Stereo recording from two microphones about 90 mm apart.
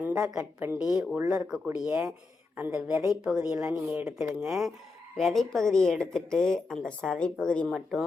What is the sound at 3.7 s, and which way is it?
Speech, 20° right (ahead or behind).